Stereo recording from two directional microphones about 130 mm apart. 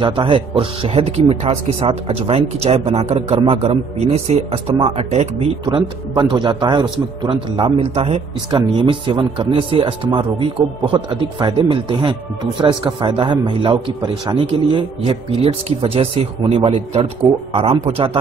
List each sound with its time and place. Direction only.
0.0 s speech: 40° right (ahead or behind)